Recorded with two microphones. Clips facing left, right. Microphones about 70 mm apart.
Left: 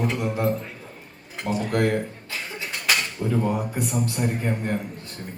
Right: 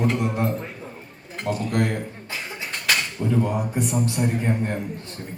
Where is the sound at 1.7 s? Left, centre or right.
Left.